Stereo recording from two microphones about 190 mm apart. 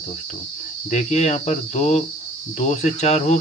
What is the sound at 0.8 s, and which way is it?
Speech, 35° left (ahead or behind).